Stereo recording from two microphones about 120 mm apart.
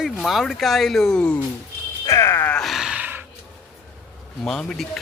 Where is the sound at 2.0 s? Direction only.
25° left (ahead or behind).